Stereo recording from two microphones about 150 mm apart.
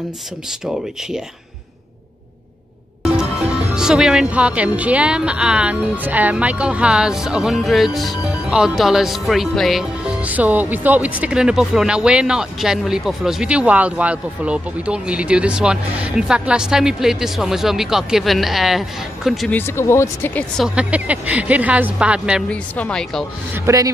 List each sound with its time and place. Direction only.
3.7 s a woman's voice: 5° right (ahead or behind)
19.5 s speech: 15° left (ahead or behind)
20.5 s speech: 5° right (ahead or behind)
22.5 s speech: 5° left (ahead or behind)
23.5 s speech: 20° right (ahead or behind)